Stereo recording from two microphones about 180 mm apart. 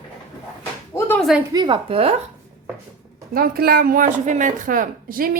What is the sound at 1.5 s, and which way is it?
Speech, 25° right (ahead or behind).